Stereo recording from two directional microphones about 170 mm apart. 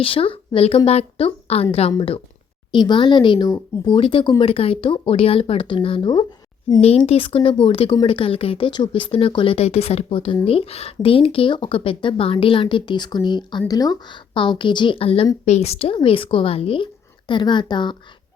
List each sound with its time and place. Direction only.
0.0 s a woman's voice: 30° left (ahead or behind)
6.8 s speech: 35° left (ahead or behind)